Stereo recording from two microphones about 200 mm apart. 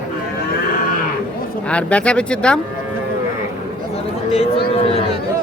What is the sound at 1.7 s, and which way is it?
Speech, 5° left (ahead or behind).